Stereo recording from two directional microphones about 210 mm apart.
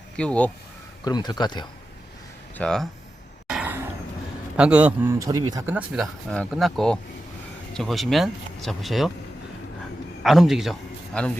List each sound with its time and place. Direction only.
0.2 s speech: 5° left (ahead or behind)
1.0 s speech: 20° left (ahead or behind)
2.6 s speech: centre (ahead or behind)
3.5 s a sound: 5° right (ahead or behind)
4.5 s a man's voice: 5° right (ahead or behind)
5.6 s speech: 5° right (ahead or behind)
10.2 s a man's voice: centre (ahead or behind)